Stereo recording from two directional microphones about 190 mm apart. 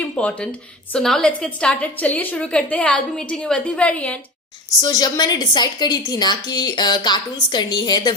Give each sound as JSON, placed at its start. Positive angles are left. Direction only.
{"t": 0.0, "sound": "a sound", "side_deg": 5}
{"t": 0.9, "sound": "a woman's voice", "side_deg": 5}
{"t": 4.8, "sound": "a woman's voice", "side_deg": 20}